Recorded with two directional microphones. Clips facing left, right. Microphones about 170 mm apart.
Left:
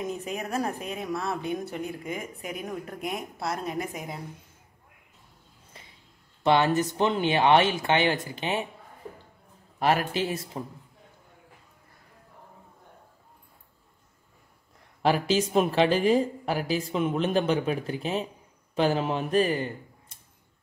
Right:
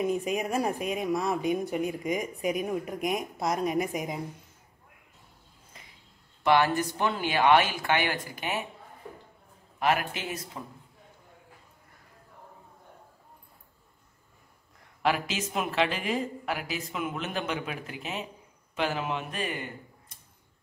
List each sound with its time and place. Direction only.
0.0 s speech: 15° right (ahead or behind)
6.4 s speech: 25° left (ahead or behind)
9.8 s a woman's voice: 35° left (ahead or behind)
15.0 s a woman's voice: 35° left (ahead or behind)